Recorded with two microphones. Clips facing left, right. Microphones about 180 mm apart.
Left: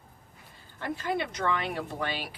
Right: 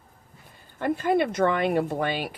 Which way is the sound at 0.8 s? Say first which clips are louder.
Right 8 dB; 55° right (ahead or behind).